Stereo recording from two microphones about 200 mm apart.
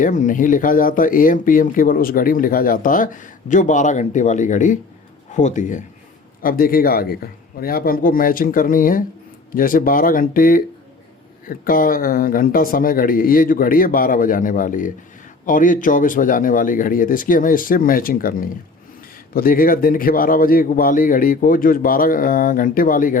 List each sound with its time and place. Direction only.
0.0 s a man's voice: 40° left (ahead or behind)